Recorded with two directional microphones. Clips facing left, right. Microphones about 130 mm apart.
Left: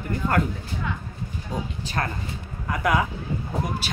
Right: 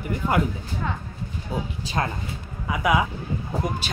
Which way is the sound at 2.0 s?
20° right (ahead or behind).